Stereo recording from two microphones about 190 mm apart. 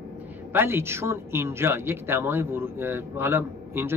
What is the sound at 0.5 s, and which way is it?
Speech, 10° right (ahead or behind).